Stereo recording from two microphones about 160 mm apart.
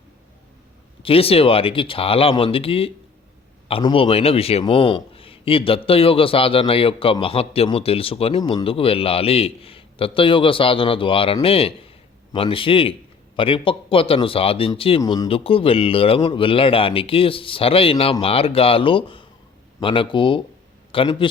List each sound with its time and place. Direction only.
1.0 s a man's voice: 35° left (ahead or behind)